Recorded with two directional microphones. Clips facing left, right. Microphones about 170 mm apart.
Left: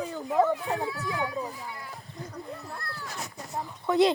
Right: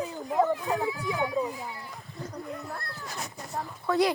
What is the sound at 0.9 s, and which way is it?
Speech, 20° right (ahead or behind).